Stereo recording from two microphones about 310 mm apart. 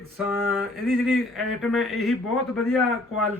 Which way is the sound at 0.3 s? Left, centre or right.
Centre.